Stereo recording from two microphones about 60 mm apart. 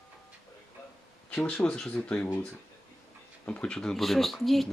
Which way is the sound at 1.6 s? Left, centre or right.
Centre.